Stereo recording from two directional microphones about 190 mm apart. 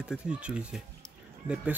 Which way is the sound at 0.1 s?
5° right (ahead or behind).